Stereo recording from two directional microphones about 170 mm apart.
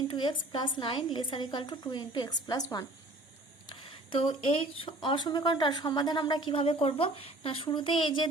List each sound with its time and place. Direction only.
0.1 s speech: 25° left (ahead or behind)
3.7 s speech: 30° left (ahead or behind)